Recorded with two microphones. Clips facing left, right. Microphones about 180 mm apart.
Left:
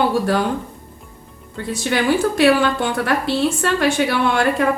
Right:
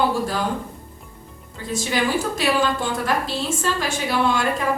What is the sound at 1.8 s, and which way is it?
A woman's voice, 65° left (ahead or behind).